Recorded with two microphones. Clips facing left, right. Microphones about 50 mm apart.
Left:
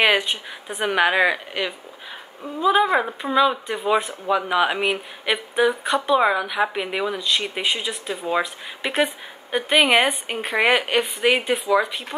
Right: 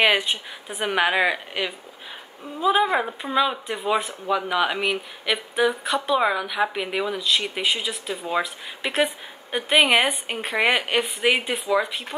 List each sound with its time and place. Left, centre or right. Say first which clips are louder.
0.0 s speech: left 1 dB; centre
4.3 s speech: left 2 dB; centre